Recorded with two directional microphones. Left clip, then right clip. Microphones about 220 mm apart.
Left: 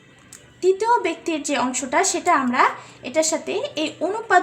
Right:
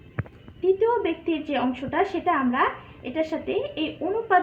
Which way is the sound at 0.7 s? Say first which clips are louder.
Left 3 dB; 55° left (ahead or behind).